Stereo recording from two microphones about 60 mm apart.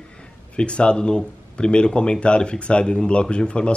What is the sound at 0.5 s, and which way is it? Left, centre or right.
Speech, centre.